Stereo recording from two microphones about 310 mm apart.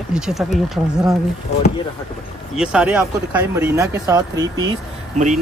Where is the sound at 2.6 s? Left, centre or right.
Centre.